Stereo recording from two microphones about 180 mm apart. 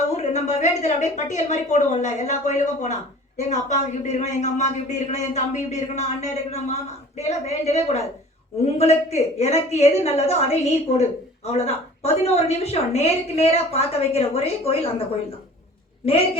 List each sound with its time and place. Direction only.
0.2 s speech: 40° left (ahead or behind)